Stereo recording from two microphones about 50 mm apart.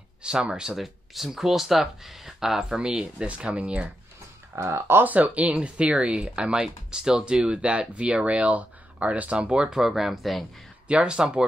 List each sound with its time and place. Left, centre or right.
0.2 s speech: centre
0.7 s speech: centre
2.8 s speech: centre
4.7 s speech: right
5.0 s speech: right; by 9.8 s centre
9.8 s speech: centre
10.9 s speech: right